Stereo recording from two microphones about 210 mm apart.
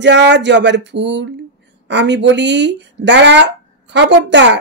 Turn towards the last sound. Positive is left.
turn(degrees=-55)  # may be behind; listen again after turning